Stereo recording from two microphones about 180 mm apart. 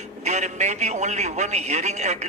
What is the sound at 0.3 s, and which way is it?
A man's voice, 40° right (ahead or behind).